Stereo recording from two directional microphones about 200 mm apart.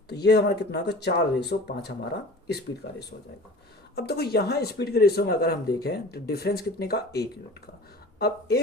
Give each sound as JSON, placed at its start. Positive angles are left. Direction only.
{"t": 0.1, "sound": "speech", "side_deg": 55}
{"t": 3.9, "sound": "speech", "side_deg": 55}